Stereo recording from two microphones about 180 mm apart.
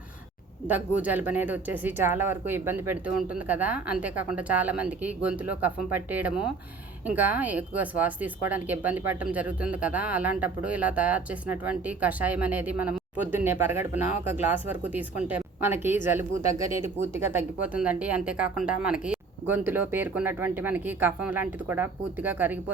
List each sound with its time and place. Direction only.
0.7 s speech: 10° right (ahead or behind)